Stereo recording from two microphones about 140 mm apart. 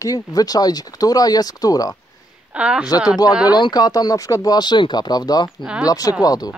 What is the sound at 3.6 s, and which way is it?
Speech, 30° left (ahead or behind).